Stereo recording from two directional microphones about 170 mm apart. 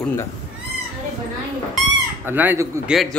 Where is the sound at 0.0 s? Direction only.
15° left (ahead or behind).